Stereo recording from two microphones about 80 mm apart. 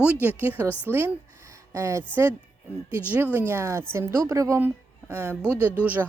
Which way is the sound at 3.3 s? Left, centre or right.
Right.